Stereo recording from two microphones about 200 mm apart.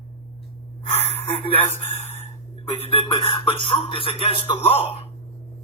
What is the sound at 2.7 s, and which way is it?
Speech, 30° left (ahead or behind).